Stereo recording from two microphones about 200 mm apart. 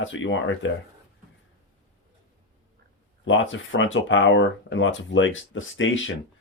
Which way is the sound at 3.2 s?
70° left (ahead or behind).